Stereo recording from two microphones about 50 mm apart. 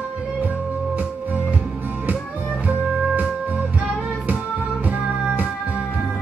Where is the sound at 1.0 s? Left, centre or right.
Right.